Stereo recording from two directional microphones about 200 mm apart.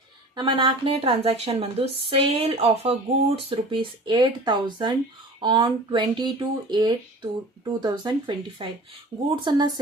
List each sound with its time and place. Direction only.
0.3 s speech: 25° right (ahead or behind)